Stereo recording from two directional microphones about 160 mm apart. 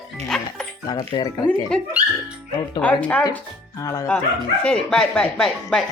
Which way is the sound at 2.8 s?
10° left (ahead or behind).